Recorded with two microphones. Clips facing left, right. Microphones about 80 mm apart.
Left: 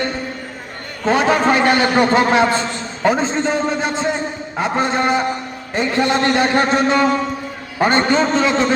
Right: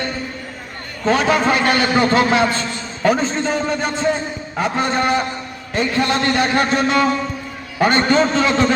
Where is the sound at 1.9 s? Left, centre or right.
Centre.